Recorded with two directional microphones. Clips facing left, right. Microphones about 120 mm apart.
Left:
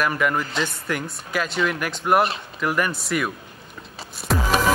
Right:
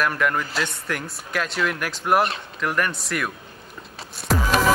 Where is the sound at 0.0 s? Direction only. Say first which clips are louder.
Left 1 dB; centre (ahead or behind).